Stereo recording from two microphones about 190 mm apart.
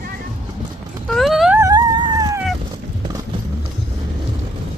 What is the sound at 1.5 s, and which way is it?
Dog, 20° right (ahead or behind).